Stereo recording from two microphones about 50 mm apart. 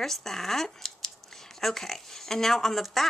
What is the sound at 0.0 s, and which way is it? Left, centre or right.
Speech, centre.